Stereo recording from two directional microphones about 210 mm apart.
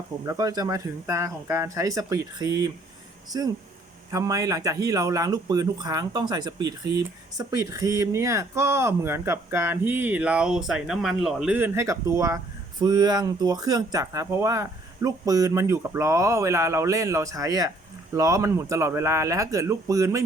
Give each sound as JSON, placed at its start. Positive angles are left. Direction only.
{"t": 0.3, "sound": "speech", "side_deg": -15}